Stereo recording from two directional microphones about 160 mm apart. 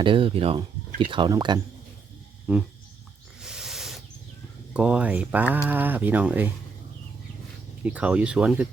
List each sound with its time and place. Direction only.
0.0 s speech: 35° right (ahead or behind)
2.5 s speech: 10° right (ahead or behind)
3.4 s snake: 5° right (ahead or behind)
4.7 s speech: 5° right (ahead or behind)
7.9 s speech: 10° right (ahead or behind)